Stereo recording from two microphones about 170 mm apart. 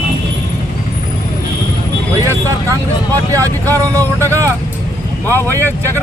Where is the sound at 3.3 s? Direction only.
20° right (ahead or behind).